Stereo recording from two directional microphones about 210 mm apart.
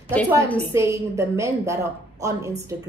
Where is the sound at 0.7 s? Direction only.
15° right (ahead or behind).